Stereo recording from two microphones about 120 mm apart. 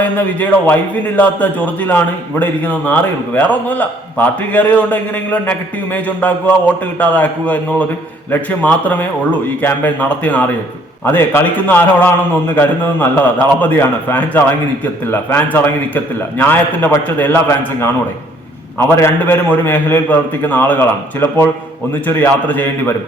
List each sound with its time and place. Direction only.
0.0 s a man's voice: 15° left (ahead or behind)